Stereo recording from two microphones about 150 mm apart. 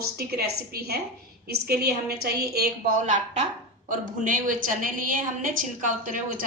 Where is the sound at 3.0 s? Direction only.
55° right (ahead or behind).